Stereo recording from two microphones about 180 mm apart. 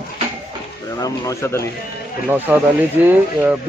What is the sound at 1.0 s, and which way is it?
Speech, 15° left (ahead or behind).